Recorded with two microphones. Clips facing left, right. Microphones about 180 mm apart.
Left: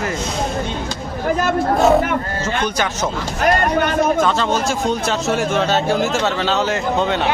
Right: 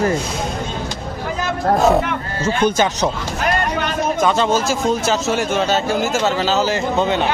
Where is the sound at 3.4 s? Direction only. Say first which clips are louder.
Left 4 dB; 50° left (ahead or behind).